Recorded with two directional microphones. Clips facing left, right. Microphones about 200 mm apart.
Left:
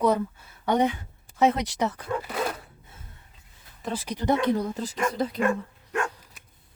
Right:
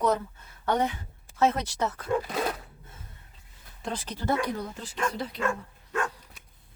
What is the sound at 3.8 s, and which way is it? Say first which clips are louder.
Speech: left 3 dB; 10° left (ahead or behind).